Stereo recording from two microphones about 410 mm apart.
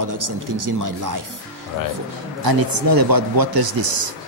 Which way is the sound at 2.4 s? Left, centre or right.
Right.